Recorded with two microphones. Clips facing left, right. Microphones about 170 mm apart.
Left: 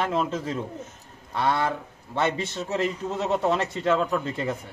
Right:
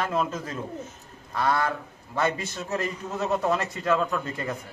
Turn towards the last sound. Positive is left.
turn(degrees=25)  # may be behind; listen again after turning